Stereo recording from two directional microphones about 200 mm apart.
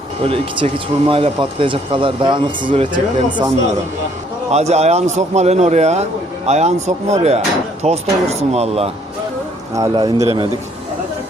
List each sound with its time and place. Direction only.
0.2 s speech: 30° right (ahead or behind)
4.5 s a man's voice: 35° right (ahead or behind)
9.7 s speech: 20° right (ahead or behind)